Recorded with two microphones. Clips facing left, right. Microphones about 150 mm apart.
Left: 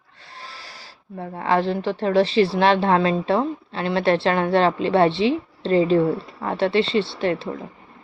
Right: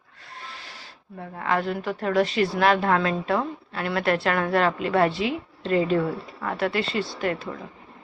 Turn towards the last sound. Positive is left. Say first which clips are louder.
# left 4 dB
turn(degrees=30)  # may be behind; listen again after turning